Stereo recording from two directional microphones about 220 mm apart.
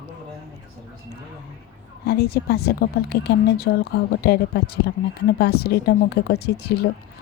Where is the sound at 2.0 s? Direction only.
45° left (ahead or behind).